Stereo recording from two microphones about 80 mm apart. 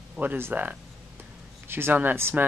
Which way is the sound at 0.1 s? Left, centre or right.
Centre.